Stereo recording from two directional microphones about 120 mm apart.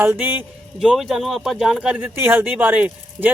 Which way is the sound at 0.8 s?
5° right (ahead or behind).